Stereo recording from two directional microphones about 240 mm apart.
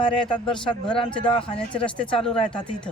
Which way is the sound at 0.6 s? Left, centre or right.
Left.